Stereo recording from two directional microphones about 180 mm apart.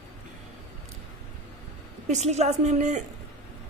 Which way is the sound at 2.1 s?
40° right (ahead or behind).